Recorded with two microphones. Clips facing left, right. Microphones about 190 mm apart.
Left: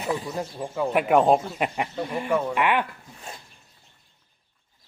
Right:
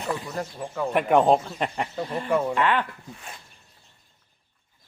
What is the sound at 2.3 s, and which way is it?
Speech, 10° right (ahead or behind).